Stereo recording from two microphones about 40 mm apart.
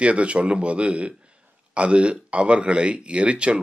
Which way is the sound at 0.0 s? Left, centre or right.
Right.